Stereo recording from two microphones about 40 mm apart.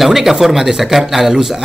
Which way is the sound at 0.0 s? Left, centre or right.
Centre.